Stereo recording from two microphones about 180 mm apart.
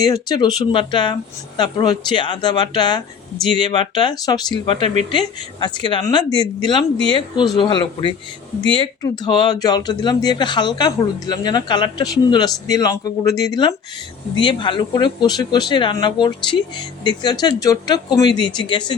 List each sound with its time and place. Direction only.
0.0 s speech: 20° left (ahead or behind)